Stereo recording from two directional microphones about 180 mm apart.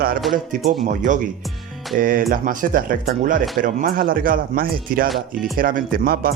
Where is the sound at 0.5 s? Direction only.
45° right (ahead or behind).